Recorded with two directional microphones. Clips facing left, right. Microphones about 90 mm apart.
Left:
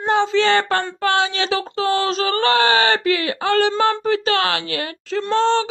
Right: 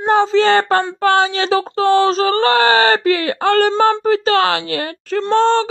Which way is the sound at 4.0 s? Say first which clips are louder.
Right 5 dB; 35° right (ahead or behind).